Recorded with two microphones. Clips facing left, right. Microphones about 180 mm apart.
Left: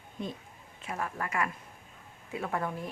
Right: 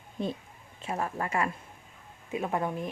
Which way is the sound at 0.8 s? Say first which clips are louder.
Right 4 dB; 30° right (ahead or behind).